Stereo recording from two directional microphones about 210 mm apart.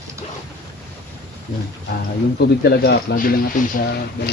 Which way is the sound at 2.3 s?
50° left (ahead or behind).